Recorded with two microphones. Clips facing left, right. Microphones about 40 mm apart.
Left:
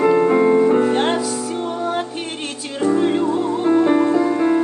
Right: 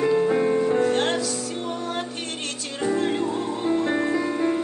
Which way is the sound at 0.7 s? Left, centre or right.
Centre.